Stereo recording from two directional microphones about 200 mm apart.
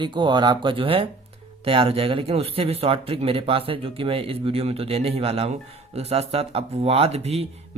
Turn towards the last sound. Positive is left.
turn(degrees=-30)  # may be behind; listen again after turning